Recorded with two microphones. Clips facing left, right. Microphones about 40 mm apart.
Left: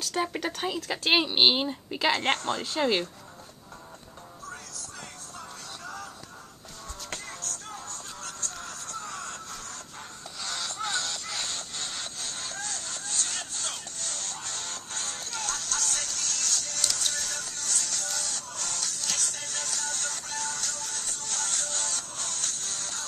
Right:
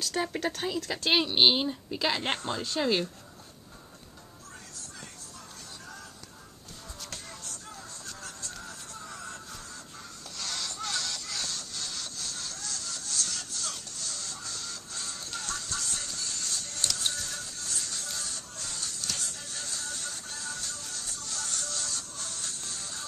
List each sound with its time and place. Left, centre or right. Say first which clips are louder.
0.0 s speech: left 1 dB; centre
2.3 s speech: left 3 dB; left
2.6 s speech: left 2 dB; left
7.4 s music: left 5 dB; left
10.4 s music: left 3 dB; centre; by 23.0 s left